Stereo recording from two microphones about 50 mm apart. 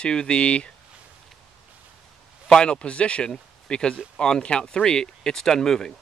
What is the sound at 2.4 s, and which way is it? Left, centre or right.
Speech, centre.